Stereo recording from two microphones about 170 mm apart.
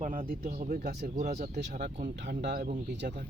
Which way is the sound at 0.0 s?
50° right (ahead or behind).